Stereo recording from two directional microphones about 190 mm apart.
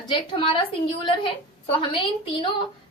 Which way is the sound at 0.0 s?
25° left (ahead or behind).